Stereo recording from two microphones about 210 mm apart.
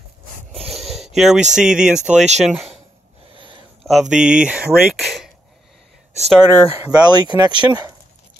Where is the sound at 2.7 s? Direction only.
25° right (ahead or behind).